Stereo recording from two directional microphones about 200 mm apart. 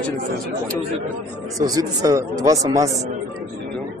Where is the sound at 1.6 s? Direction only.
20° right (ahead or behind).